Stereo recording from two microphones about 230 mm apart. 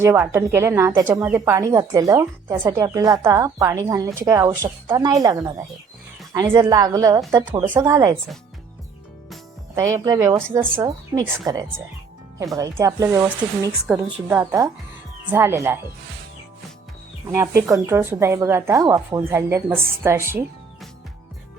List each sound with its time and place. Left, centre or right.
0.0 s a woman's voice: centre
9.7 s a woman's voice: centre
17.2 s a woman's voice: centre